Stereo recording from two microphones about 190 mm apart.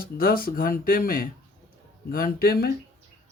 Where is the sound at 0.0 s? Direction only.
50° left (ahead or behind).